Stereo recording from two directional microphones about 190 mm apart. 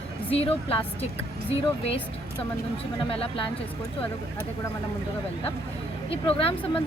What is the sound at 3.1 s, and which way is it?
Speech, 30° left (ahead or behind).